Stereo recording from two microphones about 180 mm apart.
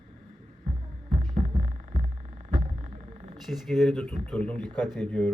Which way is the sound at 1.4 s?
40° right (ahead or behind).